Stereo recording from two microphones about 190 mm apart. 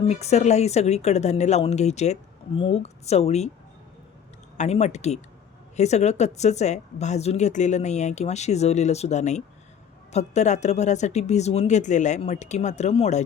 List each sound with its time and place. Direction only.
0.1 s speech: 35° left (ahead or behind)
4.5 s speech: 35° left (ahead or behind)